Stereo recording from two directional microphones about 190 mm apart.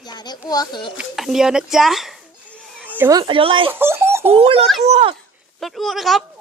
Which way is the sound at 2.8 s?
10° right (ahead or behind).